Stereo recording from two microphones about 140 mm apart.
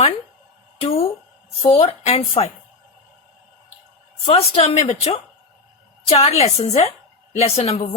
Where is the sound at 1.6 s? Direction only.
45° left (ahead or behind).